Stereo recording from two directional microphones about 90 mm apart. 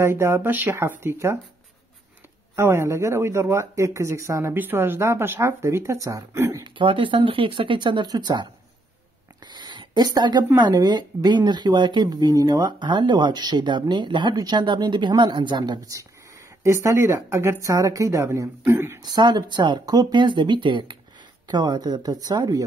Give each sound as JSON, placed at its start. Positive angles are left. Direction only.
{"t": 0.0, "sound": "speech", "side_deg": -30}
{"t": 2.5, "sound": "speech", "side_deg": -30}
{"t": 6.6, "sound": "speech", "side_deg": -65}
{"t": 18.9, "sound": "speech", "side_deg": -45}
{"t": 21.5, "sound": "speech", "side_deg": -50}